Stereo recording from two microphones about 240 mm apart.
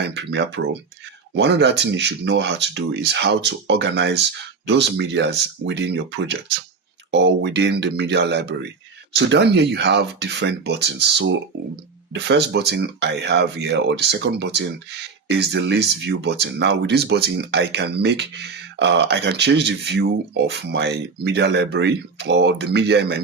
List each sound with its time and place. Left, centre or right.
0.0 s speech: right